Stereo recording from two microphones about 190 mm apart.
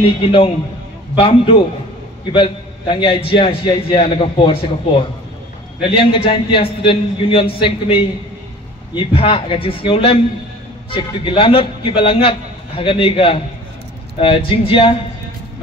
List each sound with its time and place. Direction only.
0.2 s a man's voice: 30° left (ahead or behind)